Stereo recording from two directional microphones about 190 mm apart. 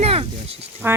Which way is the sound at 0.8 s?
10° right (ahead or behind).